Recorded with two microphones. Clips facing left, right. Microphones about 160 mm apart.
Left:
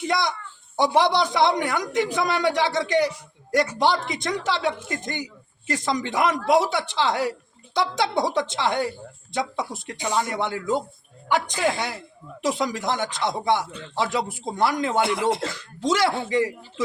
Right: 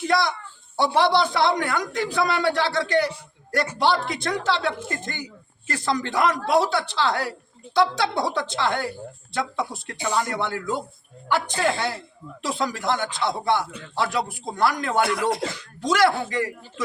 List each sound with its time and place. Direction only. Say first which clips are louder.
0.0 s a man's voice: right 2 dB; 20° left (ahead or behind)